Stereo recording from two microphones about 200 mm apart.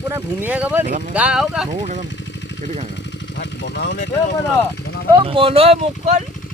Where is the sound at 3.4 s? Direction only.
60° left (ahead or behind).